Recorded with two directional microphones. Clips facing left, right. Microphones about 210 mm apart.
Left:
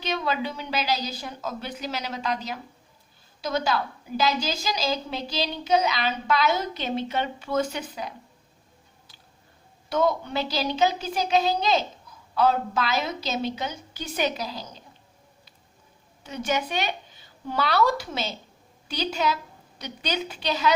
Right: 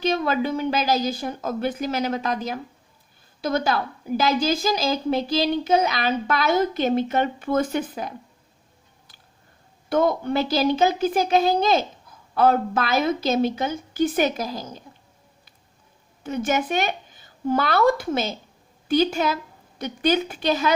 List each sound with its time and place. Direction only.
0.0 s speech: 50° right (ahead or behind)
9.9 s speech: 50° right (ahead or behind)
16.2 s speech: 50° right (ahead or behind)